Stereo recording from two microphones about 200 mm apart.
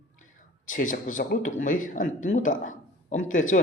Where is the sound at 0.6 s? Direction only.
40° left (ahead or behind).